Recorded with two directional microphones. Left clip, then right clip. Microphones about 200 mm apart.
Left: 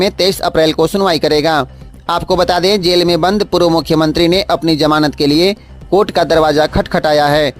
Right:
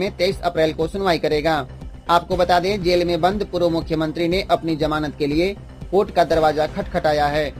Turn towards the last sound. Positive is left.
turn(degrees=40)  # may be behind; listen again after turning